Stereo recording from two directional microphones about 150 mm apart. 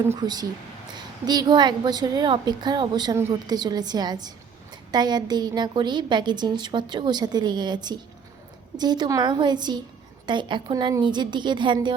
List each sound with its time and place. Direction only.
0.2 s a woman's voice: 25° right (ahead or behind)